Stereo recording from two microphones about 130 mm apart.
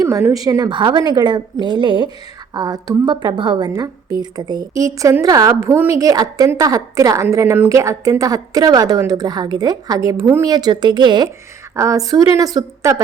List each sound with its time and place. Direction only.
0.3 s a woman's voice: 25° right (ahead or behind)
11.7 s a woman's voice: 25° right (ahead or behind)